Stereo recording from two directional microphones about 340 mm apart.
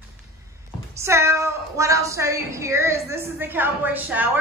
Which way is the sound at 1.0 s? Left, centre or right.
Centre.